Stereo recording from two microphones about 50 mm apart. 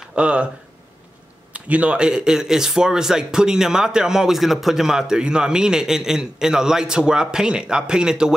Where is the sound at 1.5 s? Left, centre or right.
Right.